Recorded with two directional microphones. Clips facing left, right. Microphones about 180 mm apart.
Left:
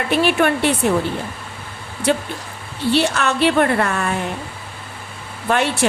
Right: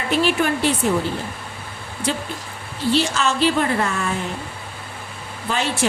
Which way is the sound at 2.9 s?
60° left (ahead or behind).